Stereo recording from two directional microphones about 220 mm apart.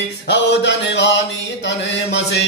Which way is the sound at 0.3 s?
55° left (ahead or behind).